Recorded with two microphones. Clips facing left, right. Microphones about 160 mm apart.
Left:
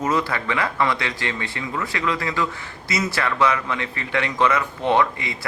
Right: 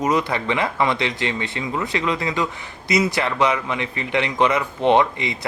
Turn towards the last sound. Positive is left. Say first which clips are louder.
# right 3 dB
turn(degrees=-20)  # may be behind; listen again after turning